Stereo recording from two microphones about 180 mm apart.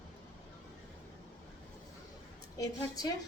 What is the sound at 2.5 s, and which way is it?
Speech, 20° left (ahead or behind).